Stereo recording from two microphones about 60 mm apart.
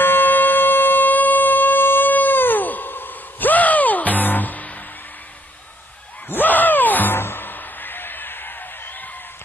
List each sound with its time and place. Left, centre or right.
0.0 s music: left
6.2 s music: left